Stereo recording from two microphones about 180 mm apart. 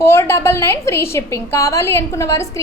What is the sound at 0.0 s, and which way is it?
A woman's voice, 15° left (ahead or behind).